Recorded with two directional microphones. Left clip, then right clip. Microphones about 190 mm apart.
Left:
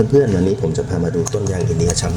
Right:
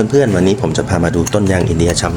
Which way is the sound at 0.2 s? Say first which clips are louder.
Right 3 dB; 15° right (ahead or behind).